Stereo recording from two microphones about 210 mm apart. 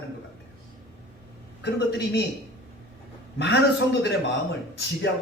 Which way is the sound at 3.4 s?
55° left (ahead or behind).